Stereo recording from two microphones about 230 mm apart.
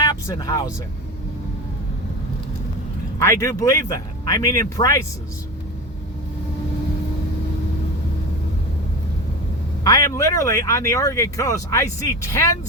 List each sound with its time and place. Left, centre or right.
0.0 s vehicle: centre
3.2 s speech: centre
9.8 s speech: centre